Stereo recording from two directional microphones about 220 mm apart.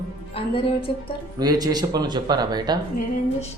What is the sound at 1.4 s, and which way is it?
Speech, 15° right (ahead or behind).